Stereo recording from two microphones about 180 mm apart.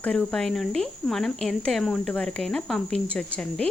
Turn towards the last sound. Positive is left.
turn(degrees=5)  # may be behind; listen again after turning